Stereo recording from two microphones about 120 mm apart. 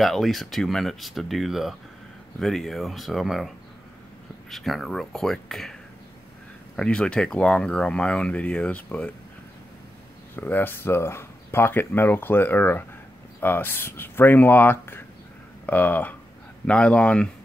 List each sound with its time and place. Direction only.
0.0 s speech: centre (ahead or behind)
6.8 s speech: 5° left (ahead or behind)
10.3 s speech: 15° left (ahead or behind)